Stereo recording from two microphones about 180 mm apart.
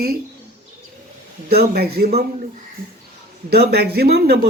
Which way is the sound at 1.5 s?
60° right (ahead or behind).